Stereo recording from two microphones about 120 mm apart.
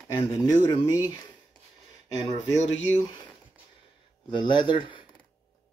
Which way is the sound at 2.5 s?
70° left (ahead or behind).